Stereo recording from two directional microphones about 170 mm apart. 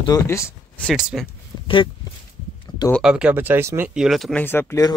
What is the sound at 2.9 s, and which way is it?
Speech, 5° right (ahead or behind).